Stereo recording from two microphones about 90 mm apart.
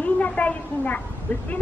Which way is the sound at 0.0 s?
15° left (ahead or behind).